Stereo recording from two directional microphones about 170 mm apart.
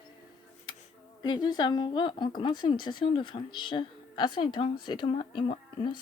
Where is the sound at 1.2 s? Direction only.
25° left (ahead or behind).